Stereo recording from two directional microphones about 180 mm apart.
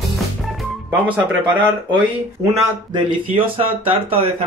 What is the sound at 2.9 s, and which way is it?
Speech, 30° right (ahead or behind).